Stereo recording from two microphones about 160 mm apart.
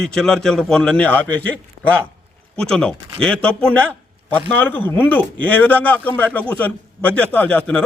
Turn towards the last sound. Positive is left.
turn(degrees=5)  # may be behind; listen again after turning